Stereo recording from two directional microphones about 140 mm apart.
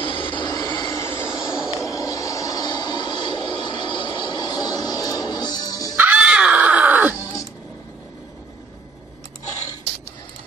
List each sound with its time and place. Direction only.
0.0 s train: 35° left (ahead or behind)
1.0 s vehicle: 15° left (ahead or behind)
5.9 s music: 10° right (ahead or behind)